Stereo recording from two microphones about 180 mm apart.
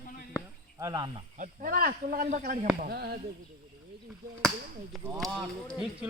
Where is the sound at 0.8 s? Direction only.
25° right (ahead or behind).